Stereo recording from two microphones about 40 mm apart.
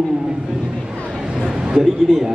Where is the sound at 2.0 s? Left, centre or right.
Centre.